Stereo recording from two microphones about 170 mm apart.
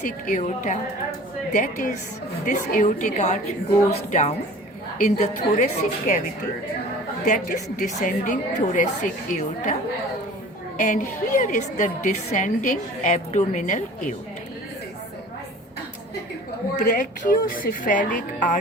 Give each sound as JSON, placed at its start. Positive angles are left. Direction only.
{"t": 0.3, "sound": "a woman's voice", "side_deg": 45}
{"t": 7.3, "sound": "a woman's voice", "side_deg": 50}
{"t": 10.8, "sound": "a woman's voice", "side_deg": 50}
{"t": 16.7, "sound": "a woman's voice", "side_deg": 50}